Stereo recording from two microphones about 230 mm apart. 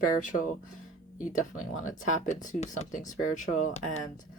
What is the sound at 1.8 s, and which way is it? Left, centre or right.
Speech, left.